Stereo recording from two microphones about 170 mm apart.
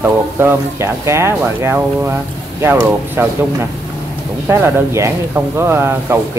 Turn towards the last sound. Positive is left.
turn(degrees=-15)  # may be behind; listen again after turning